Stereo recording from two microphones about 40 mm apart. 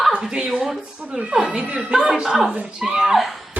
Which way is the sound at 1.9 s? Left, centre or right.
Centre.